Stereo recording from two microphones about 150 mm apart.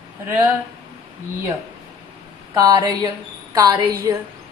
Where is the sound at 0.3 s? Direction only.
15° right (ahead or behind).